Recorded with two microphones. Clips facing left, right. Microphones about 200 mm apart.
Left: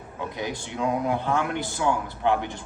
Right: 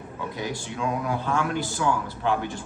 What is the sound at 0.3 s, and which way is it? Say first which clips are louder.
A man's voice: left 1 dB; 20° left (ahead or behind).